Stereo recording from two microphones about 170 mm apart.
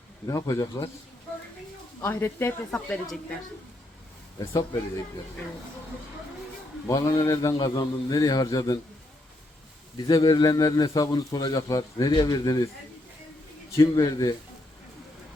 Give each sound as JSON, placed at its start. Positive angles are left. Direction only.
{"t": 0.3, "sound": "speech", "side_deg": 20}
{"t": 2.0, "sound": "a woman's voice", "side_deg": 15}
{"t": 4.4, "sound": "speech", "side_deg": 20}
{"t": 6.8, "sound": "speech", "side_deg": 20}
{"t": 10.0, "sound": "speech", "side_deg": 25}
{"t": 13.7, "sound": "speech", "side_deg": 20}